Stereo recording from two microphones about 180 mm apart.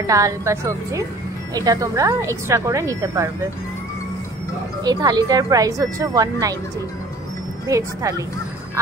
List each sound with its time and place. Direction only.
0.0 s a woman's voice: 15° right (ahead or behind)
4.8 s a woman's voice: 20° right (ahead or behind)
7.6 s a woman's voice: 20° right (ahead or behind)